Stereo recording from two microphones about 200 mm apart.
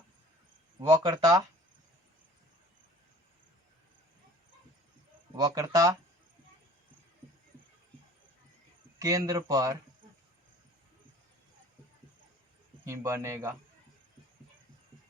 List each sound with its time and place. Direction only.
0.8 s speech: 20° right (ahead or behind)
5.4 s speech: 15° right (ahead or behind)
9.0 s speech: 15° right (ahead or behind)
12.8 s speech: 15° right (ahead or behind)